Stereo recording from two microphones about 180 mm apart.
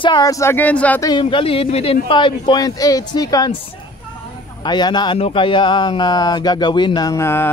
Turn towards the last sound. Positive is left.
turn(degrees=15)  # may be behind; listen again after turning